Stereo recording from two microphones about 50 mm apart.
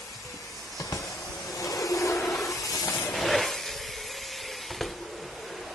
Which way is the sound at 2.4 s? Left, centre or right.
Left.